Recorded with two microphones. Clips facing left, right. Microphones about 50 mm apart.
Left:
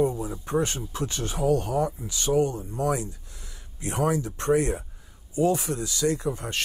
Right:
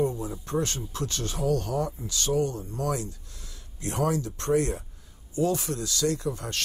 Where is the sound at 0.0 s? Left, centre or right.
Centre.